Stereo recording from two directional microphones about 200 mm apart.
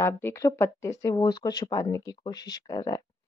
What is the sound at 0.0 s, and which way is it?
Speech, 15° left (ahead or behind).